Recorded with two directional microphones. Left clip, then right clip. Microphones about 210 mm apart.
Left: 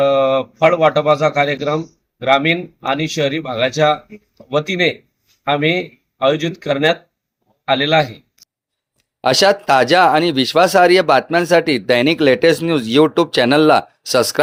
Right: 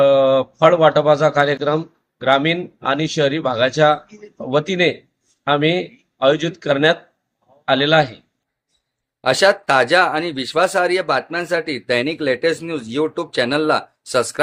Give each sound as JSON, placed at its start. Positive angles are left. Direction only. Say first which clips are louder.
{"t": 0.0, "sound": "speech", "louder": "right 1 dB", "side_deg": 0}
{"t": 9.2, "sound": "speech", "louder": "left 2 dB", "side_deg": 35}